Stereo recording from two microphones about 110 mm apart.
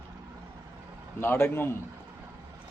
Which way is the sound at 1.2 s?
20° left (ahead or behind).